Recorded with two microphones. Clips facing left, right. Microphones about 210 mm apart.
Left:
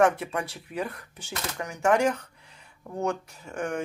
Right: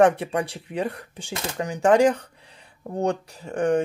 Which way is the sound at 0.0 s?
30° right (ahead or behind).